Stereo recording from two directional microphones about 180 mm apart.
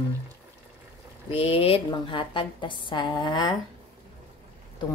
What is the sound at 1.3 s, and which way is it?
Speech, 30° left (ahead or behind).